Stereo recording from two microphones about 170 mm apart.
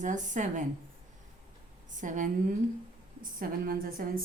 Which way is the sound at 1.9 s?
50° right (ahead or behind).